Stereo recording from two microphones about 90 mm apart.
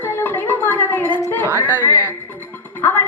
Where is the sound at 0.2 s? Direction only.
20° left (ahead or behind).